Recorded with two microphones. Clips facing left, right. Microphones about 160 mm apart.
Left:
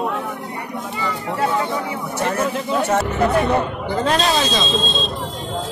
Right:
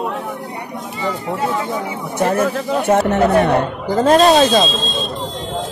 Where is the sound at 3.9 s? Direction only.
45° right (ahead or behind).